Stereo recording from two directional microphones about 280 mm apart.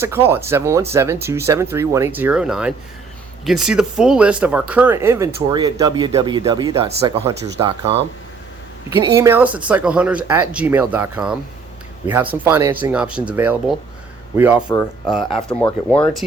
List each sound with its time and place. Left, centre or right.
0.0 s speech: centre